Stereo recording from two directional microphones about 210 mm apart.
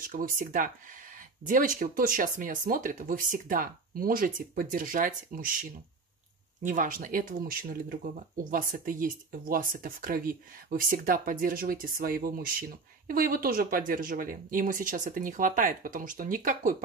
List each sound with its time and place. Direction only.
0.0 s speech: 40° right (ahead or behind)